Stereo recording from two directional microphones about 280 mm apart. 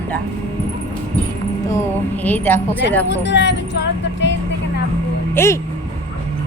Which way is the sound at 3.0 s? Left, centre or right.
Left.